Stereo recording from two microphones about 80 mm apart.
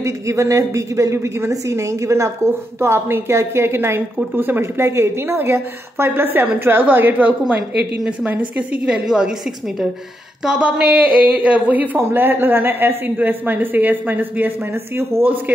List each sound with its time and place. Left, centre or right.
0.0 s a woman's voice: right; by 9.3 s centre
10.4 s a woman's voice: centre; by 15.3 s right